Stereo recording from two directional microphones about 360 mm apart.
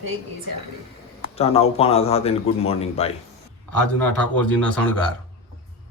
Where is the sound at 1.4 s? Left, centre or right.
Centre.